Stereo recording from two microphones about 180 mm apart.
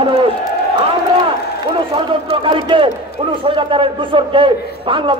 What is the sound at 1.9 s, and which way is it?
A man's voice, 25° right (ahead or behind).